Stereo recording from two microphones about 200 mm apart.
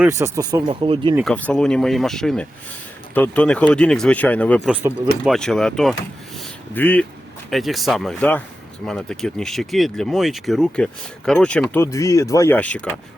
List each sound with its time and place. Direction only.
0.0 s speech: 15° right (ahead or behind)
1.2 s speech: 5° left (ahead or behind)
4.7 s speech: 5° right (ahead or behind)